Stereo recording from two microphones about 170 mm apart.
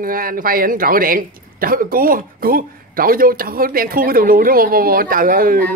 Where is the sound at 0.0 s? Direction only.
55° right (ahead or behind).